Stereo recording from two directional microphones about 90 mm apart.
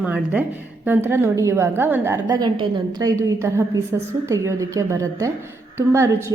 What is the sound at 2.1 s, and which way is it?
A woman's voice, 45° right (ahead or behind).